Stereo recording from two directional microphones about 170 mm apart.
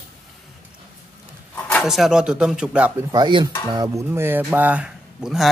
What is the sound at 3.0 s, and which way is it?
Dishes, 25° right (ahead or behind).